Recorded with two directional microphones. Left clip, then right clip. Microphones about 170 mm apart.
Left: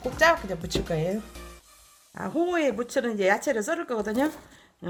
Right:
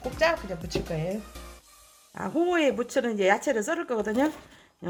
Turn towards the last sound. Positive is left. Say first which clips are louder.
# right 1 dB
turn(degrees=-5)  # may be behind; listen again after turning